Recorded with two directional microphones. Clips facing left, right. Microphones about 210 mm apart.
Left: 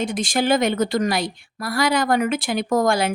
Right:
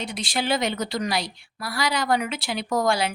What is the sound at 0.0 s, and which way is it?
A woman's voice, 45° left (ahead or behind).